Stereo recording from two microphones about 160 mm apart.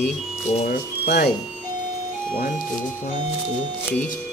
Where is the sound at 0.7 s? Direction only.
80° left.